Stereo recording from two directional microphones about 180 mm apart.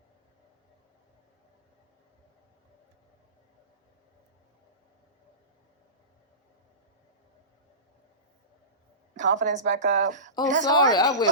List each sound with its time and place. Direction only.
9.1 s a woman's voice: 45° right (ahead or behind)
10.6 s speech: 20° left (ahead or behind)